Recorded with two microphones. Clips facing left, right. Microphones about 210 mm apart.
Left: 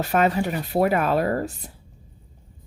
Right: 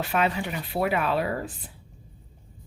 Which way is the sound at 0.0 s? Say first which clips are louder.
Left 5 dB; 40° left (ahead or behind).